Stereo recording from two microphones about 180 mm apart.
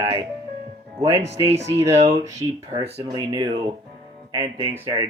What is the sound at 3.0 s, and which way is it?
Speech, 25° right (ahead or behind).